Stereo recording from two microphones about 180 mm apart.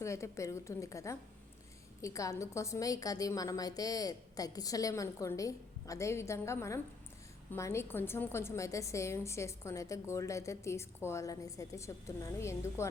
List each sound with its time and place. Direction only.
0.0 s a woman's voice: 15° left (ahead or behind)